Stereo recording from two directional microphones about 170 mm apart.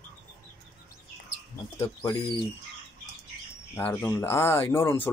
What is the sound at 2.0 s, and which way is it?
Speech, 30° left (ahead or behind).